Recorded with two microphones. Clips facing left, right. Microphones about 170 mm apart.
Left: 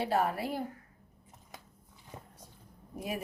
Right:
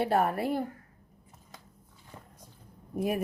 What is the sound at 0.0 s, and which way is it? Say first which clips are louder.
Speech: right 4 dB; 55° right (ahead or behind).